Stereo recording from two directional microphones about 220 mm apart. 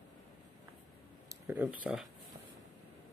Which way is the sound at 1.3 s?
10° right (ahead or behind).